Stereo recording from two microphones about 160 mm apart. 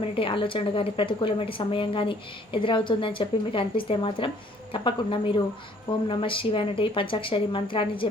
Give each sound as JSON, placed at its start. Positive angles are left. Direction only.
{"t": 0.1, "sound": "a woman's voice", "side_deg": 35}